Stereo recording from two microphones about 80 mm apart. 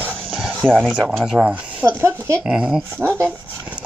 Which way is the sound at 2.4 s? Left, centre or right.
Centre.